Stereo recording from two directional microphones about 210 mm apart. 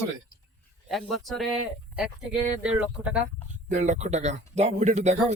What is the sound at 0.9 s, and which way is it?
Speech, centre (ahead or behind).